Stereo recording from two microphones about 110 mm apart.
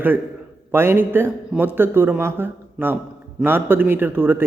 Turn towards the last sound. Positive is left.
turn(degrees=-20)  # may be behind; listen again after turning